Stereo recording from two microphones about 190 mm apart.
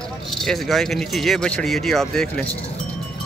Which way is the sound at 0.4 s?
Centre (ahead or behind).